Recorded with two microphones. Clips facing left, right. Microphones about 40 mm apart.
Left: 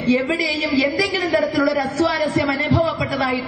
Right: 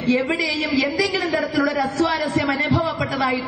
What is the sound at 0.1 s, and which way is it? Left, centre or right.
A man's voice, left.